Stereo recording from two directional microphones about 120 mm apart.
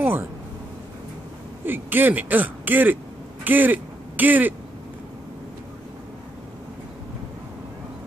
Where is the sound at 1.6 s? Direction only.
15° right (ahead or behind).